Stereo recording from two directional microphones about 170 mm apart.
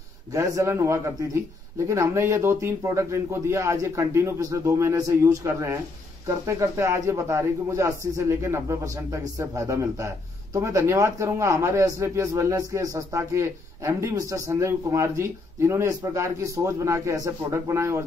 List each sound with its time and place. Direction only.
0.3 s a man's voice: 20° right (ahead or behind)